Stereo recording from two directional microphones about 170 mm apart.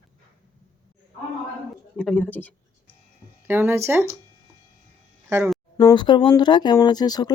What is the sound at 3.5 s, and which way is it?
Speech, 15° right (ahead or behind).